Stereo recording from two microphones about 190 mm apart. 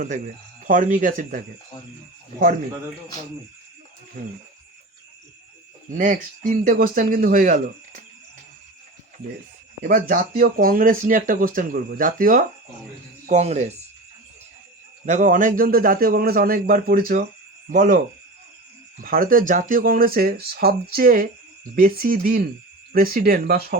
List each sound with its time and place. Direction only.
0.6 s speech: 40° right (ahead or behind)
5.9 s speech: 45° right (ahead or behind)
9.8 s speech: 45° right (ahead or behind)
15.0 s speech: 40° right (ahead or behind)
19.0 s speech: 45° right (ahead or behind)